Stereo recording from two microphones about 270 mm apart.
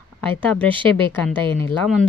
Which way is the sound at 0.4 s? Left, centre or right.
Centre.